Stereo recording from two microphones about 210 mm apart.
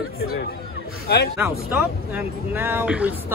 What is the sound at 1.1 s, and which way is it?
Speech, 55° left (ahead or behind).